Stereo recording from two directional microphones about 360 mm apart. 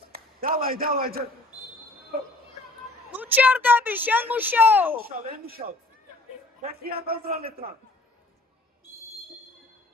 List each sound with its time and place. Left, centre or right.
0.1 s a sound: right
3.1 s a woman's voice: centre
5.0 s a man's voice: right